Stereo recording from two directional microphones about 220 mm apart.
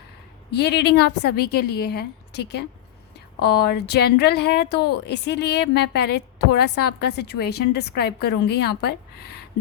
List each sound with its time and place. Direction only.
0.5 s a woman's voice: 50° left (ahead or behind)